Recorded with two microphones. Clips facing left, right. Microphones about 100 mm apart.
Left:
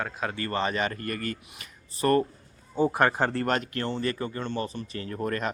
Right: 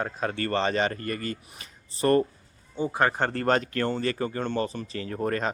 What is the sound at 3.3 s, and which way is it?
Speech, 65° right (ahead or behind).